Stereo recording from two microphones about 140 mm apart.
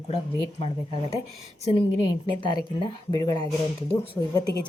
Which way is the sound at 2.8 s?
30° left (ahead or behind).